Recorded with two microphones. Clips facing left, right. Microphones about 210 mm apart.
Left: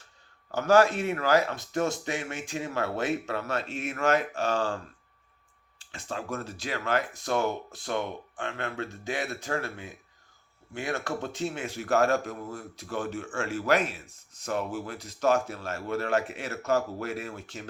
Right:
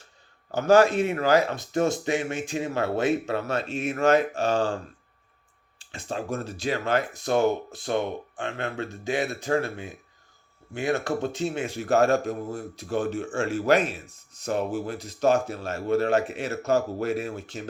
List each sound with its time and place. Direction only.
0.5 s speech: 20° right (ahead or behind)
5.9 s speech: 25° right (ahead or behind)